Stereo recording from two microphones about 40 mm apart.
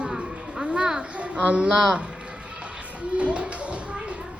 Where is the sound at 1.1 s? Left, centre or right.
Right.